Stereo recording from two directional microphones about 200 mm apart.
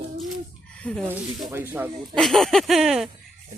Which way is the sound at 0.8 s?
5° left (ahead or behind).